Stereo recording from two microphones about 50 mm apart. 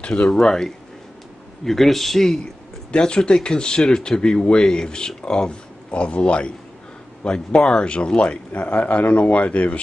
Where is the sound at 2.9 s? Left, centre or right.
Centre.